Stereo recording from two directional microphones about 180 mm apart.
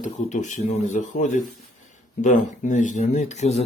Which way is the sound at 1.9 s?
45° left (ahead or behind).